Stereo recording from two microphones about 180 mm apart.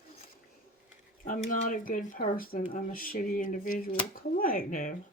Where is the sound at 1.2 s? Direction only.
45° left (ahead or behind).